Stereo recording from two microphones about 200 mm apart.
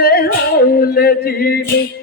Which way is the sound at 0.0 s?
50° left (ahead or behind).